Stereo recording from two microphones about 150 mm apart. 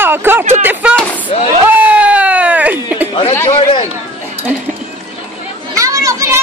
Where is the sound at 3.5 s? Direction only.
45° left (ahead or behind).